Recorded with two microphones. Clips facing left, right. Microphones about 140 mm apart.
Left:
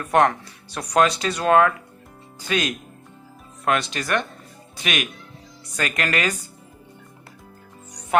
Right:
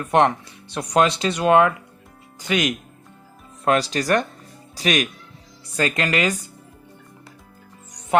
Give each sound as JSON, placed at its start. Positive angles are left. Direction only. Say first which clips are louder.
{"t": 0.0, "sound": "speech", "louder": "right 1 dB", "side_deg": -20}
{"t": 3.6, "sound": "speech", "louder": "right 3 dB", "side_deg": -35}